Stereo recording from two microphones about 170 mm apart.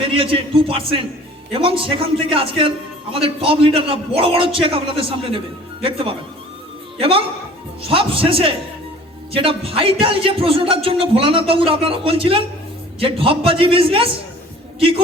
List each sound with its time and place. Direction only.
0.0 s a man's voice: 30° right (ahead or behind)